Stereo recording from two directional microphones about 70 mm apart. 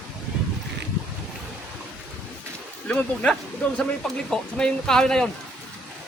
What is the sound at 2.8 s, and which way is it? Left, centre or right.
Speech, centre.